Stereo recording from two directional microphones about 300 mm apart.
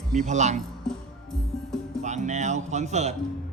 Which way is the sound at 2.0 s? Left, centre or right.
Right.